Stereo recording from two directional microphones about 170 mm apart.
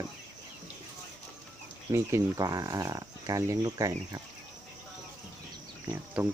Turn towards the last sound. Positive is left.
turn(degrees=-10)  # may be behind; listen again after turning